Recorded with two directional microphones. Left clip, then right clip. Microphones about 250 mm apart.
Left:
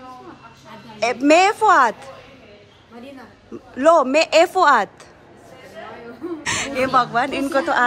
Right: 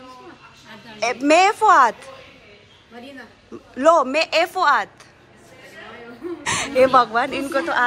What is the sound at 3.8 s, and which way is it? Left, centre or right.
Speech, centre.